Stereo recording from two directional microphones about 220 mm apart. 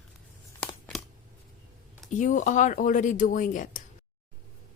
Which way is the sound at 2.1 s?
35° left (ahead or behind).